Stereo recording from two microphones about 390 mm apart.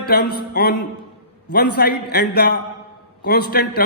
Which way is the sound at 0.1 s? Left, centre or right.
Left.